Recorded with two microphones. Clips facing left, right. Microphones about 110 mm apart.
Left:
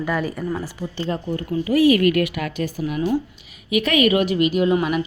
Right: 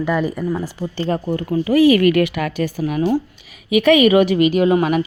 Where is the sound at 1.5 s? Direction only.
90° right.